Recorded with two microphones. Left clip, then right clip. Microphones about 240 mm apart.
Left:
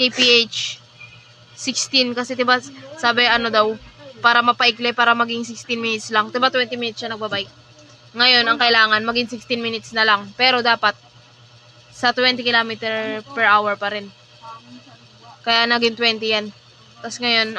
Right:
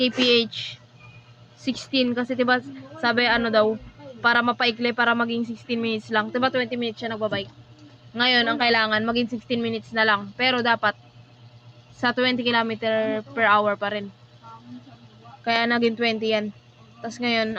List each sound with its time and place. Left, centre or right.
0.2 s a woman's voice: left
11.9 s a woman's voice: left
15.4 s a woman's voice: left